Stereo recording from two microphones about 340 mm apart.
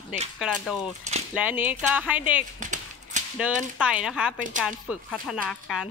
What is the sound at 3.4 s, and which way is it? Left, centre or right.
Speech, centre.